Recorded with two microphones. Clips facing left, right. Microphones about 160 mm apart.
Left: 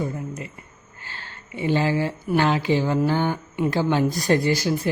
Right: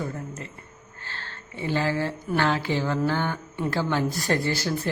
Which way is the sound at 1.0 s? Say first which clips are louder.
Even; 15° left (ahead or behind).